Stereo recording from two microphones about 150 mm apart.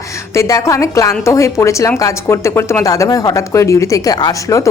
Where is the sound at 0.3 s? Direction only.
20° left (ahead or behind).